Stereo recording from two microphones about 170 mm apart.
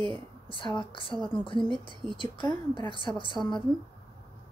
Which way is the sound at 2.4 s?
30° left (ahead or behind).